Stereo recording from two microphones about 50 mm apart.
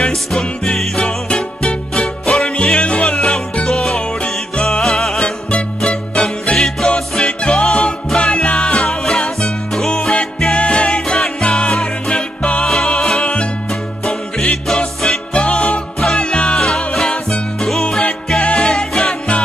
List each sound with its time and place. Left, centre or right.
0.1 s music: centre
4.8 s music: centre
12.6 s music: centre
12.9 s music: centre
14.0 s music: centre
16.5 s music: centre